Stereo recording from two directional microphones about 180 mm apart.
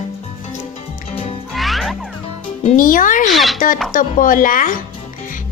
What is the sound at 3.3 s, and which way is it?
Speech, centre (ahead or behind).